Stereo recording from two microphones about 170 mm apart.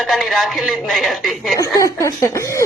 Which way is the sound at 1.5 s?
20° left (ahead or behind).